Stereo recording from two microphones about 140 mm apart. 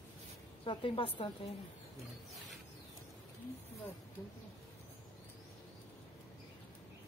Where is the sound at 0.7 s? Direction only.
40° left (ahead or behind).